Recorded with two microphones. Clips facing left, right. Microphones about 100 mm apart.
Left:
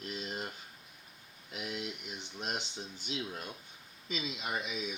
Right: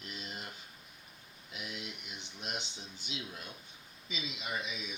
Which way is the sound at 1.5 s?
35° left (ahead or behind).